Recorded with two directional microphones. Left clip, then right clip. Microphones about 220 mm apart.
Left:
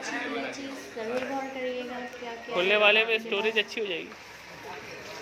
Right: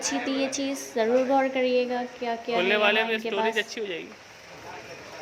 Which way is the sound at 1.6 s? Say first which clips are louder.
Right 9 dB; 35° right (ahead or behind).